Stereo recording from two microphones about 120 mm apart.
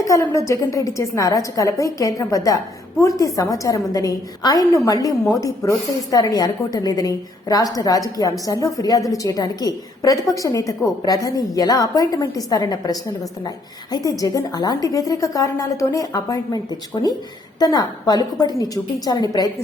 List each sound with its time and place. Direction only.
0.1 s a woman's voice: 25° left (ahead or behind)